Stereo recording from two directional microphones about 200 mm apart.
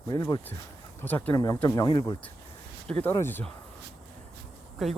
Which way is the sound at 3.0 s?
10° left (ahead or behind).